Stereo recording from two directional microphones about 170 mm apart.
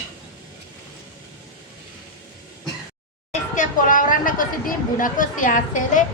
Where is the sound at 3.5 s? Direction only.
50° left (ahead or behind).